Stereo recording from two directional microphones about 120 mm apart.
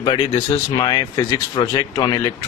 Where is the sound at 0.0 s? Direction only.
40° left (ahead or behind).